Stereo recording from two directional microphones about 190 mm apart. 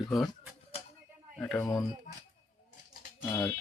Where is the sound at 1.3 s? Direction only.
5° left (ahead or behind).